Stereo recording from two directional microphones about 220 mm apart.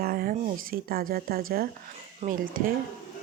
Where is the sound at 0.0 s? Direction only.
45° right (ahead or behind).